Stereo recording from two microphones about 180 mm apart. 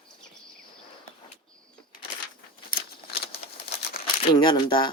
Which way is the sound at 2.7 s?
60° left (ahead or behind).